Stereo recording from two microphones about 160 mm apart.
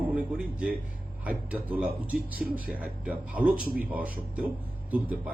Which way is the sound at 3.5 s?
70° right (ahead or behind).